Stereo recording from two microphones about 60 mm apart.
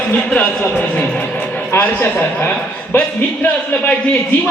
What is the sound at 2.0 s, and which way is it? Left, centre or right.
A man's voice, left.